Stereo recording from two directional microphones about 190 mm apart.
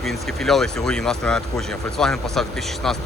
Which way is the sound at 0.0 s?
Centre (ahead or behind).